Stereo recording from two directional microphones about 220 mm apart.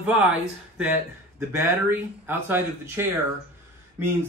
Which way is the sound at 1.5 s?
10° right (ahead or behind).